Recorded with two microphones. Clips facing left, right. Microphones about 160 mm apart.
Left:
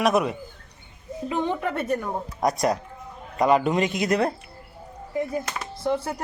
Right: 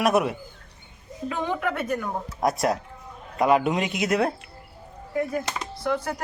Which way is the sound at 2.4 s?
5° right (ahead or behind).